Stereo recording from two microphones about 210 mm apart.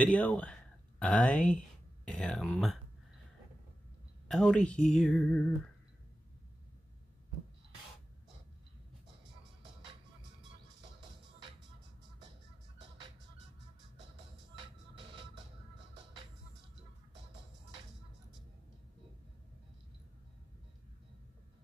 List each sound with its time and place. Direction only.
0.0 s speech: 5° left (ahead or behind)
4.3 s speech: 5° left (ahead or behind)
15.0 s music: 20° right (ahead or behind)